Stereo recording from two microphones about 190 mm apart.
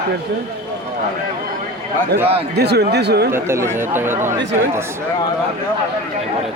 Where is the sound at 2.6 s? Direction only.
60° right (ahead or behind).